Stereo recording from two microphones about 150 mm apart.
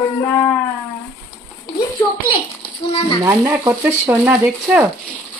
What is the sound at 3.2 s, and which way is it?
Frying, 20° right (ahead or behind).